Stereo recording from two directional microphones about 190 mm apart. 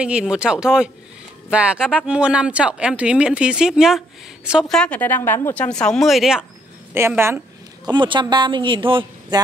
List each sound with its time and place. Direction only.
0.0 s speech: 5° right (ahead or behind)
6.9 s a woman's voice: 10° right (ahead or behind)